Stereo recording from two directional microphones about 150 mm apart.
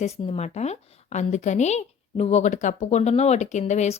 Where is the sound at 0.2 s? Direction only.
45° left (ahead or behind).